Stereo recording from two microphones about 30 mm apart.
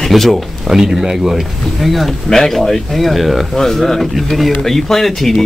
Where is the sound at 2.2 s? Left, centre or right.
Centre.